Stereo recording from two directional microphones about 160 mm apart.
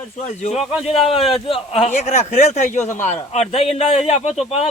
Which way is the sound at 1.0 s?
35° left (ahead or behind).